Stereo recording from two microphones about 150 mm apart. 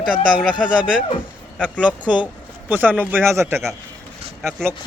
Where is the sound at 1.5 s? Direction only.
10° left (ahead or behind).